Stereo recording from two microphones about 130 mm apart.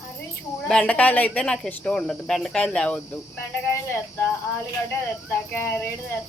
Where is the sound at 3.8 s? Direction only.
20° left (ahead or behind).